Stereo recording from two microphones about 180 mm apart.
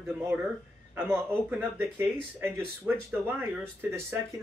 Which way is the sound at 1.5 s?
10° right (ahead or behind).